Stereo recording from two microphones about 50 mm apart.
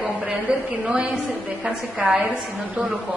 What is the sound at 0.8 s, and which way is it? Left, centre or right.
A woman's voice, centre.